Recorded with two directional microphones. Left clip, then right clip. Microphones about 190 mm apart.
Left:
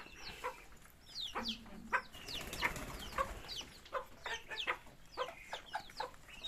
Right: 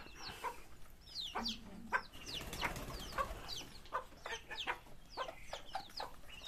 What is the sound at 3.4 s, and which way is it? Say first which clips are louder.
Chicken: left 1 dB; 55° right (ahead or behind).